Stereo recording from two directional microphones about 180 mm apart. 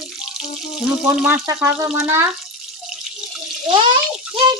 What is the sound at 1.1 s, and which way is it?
Speech, 5° right (ahead or behind).